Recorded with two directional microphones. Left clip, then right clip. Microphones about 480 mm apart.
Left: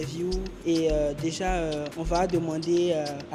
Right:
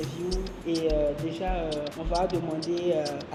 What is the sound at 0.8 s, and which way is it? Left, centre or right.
Speech, left.